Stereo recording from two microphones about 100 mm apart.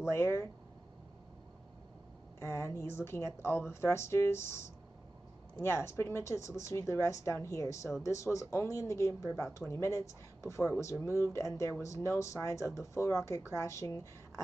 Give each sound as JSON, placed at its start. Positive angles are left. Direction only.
{"t": 0.1, "sound": "speech", "side_deg": 25}
{"t": 2.4, "sound": "speech", "side_deg": 25}
{"t": 5.6, "sound": "speech", "side_deg": 25}